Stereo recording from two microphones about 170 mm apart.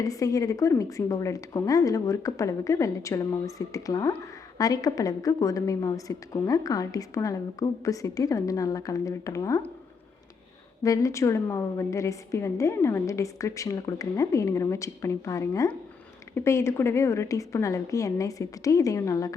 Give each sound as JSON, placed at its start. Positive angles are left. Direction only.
{"t": 0.0, "sound": "a woman's voice", "side_deg": 20}
{"t": 10.8, "sound": "a woman's voice", "side_deg": 20}